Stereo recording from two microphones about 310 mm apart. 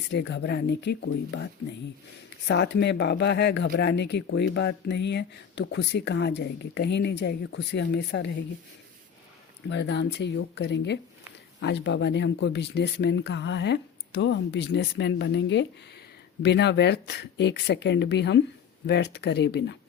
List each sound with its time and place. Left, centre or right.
0.1 s speech: left
2.5 s speech: left
9.6 s speech: left